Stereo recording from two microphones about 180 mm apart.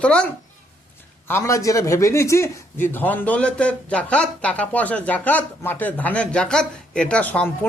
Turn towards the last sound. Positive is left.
turn(degrees=10)  # may be behind; listen again after turning